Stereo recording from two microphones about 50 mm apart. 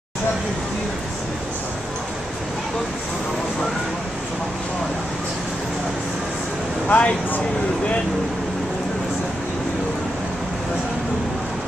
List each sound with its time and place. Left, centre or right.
6.9 s speech: left